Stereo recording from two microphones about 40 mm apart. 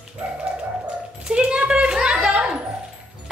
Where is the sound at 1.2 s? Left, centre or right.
Right.